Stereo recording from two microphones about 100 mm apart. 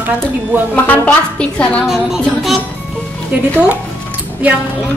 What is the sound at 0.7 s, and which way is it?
A woman's voice, 15° left (ahead or behind).